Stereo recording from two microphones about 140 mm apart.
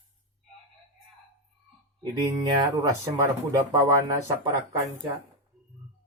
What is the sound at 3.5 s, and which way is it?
Speech, 25° right (ahead or behind).